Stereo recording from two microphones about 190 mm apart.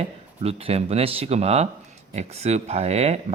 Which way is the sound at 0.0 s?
30° right (ahead or behind).